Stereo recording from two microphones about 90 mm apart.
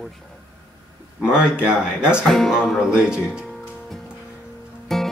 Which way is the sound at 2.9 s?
10° right (ahead or behind).